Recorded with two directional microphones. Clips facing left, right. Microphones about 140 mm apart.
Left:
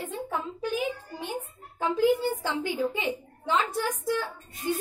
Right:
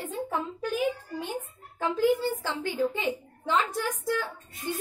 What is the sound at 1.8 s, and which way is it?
A woman's voice, 15° left (ahead or behind).